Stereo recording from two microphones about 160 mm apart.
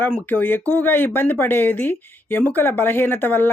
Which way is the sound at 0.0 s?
10° left (ahead or behind).